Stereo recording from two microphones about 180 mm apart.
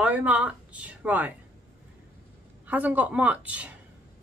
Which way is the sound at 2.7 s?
10° right (ahead or behind).